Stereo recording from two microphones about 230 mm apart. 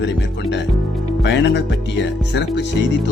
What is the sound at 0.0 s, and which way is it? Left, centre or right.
Speech, left.